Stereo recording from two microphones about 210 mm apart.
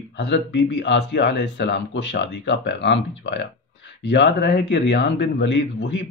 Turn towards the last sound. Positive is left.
turn(degrees=55)  # may be behind; listen again after turning